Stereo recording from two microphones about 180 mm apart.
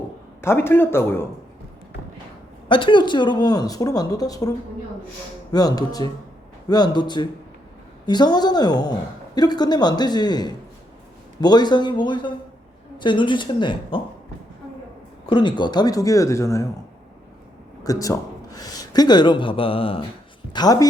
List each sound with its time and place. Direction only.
0.4 s speech: 15° left (ahead or behind)
2.6 s a woman's voice: 25° left (ahead or behind)
15.3 s a woman's voice: 25° left (ahead or behind)
17.8 s a woman's voice: 20° left (ahead or behind)